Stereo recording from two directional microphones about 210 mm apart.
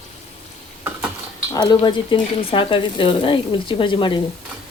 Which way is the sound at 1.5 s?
20° left (ahead or behind).